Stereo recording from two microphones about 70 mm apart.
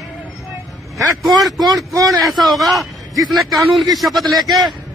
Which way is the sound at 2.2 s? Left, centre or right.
Centre.